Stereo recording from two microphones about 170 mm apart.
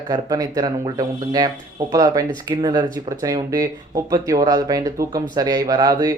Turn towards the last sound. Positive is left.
turn(degrees=-20)  # may be behind; listen again after turning